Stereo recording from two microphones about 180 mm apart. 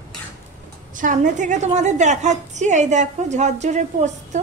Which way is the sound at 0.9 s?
45° right (ahead or behind).